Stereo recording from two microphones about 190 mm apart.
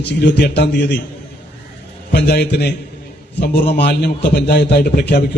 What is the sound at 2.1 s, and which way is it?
A man's voice, 60° left (ahead or behind).